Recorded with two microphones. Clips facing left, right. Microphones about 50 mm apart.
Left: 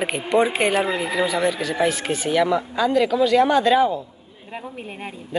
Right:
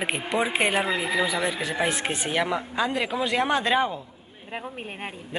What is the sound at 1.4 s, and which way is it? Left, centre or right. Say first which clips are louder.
Speech: left 5 dB; right.